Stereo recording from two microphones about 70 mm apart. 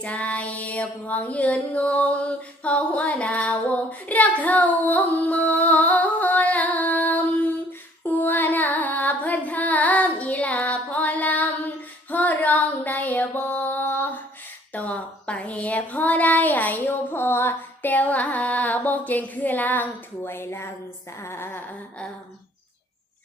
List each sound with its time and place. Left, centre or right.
0.0 s music: left
12.1 s child singing: left
13.3 s mantra: left
14.7 s a sound: left
17.9 s music: left
21.2 s a woman's voice: left